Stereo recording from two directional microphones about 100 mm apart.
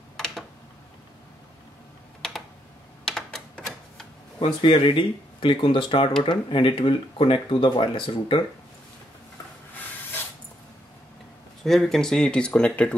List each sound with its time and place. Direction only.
0.2 s a sound: 5° left (ahead or behind)
3.1 s typing: 5° left (ahead or behind)
4.4 s speech: 65° left (ahead or behind)
11.6 s speech: centre (ahead or behind)